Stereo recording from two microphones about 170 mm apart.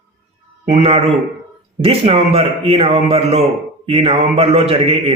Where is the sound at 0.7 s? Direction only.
35° right (ahead or behind).